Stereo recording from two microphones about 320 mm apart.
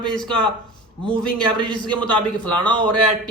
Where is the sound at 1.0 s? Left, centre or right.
Centre.